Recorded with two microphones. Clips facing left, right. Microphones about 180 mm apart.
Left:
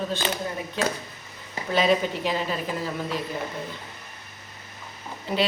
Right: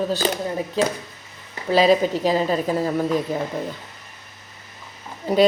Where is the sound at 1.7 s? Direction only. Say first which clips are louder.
Right 6 dB; 35° right (ahead or behind).